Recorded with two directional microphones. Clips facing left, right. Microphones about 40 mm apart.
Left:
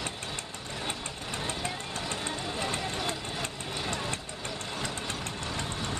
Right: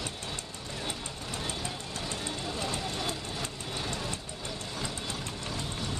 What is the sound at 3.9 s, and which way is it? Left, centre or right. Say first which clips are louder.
Vehicle: left 2 dB; left.